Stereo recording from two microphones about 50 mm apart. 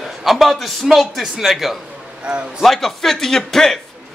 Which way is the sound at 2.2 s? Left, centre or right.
Right.